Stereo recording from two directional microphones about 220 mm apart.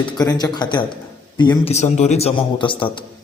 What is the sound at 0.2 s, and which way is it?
A man's voice, 15° left (ahead or behind).